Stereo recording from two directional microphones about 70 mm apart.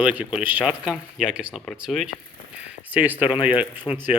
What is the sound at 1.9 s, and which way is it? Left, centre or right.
Speech, centre.